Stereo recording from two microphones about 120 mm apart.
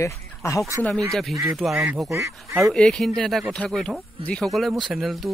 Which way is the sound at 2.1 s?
25° right (ahead or behind).